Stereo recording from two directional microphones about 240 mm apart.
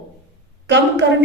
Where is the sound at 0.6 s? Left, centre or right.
Right.